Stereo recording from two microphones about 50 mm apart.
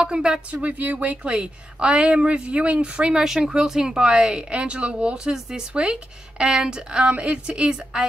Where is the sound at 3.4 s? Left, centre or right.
Centre.